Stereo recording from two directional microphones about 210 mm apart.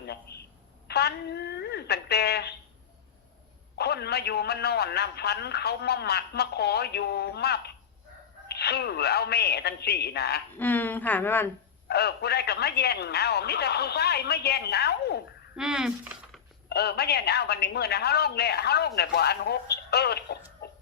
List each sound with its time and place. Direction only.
0.0 s telephone: 50° left (ahead or behind)
0.9 s a woman's voice: 50° left (ahead or behind)
3.8 s a woman's voice: 50° left (ahead or behind)
10.6 s a woman's voice: 10° left (ahead or behind)
11.9 s a woman's voice: 50° left (ahead or behind)
15.5 s speech: 5° right (ahead or behind)
16.6 s a woman's voice: 50° left (ahead or behind)